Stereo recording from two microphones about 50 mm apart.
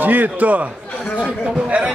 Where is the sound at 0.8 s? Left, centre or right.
Left.